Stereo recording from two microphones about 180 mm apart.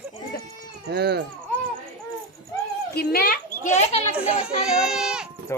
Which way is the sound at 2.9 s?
60° left (ahead or behind).